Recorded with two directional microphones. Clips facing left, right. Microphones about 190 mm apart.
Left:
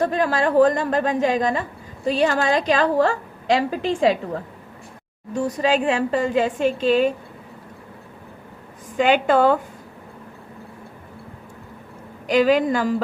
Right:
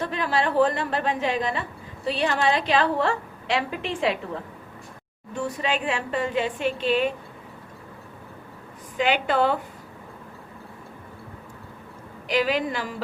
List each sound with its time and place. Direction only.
0.0 s a woman's voice: 45° left (ahead or behind)
5.3 s a woman's voice: 40° left (ahead or behind)
9.0 s a woman's voice: 45° left (ahead or behind)
12.3 s a woman's voice: 45° left (ahead or behind)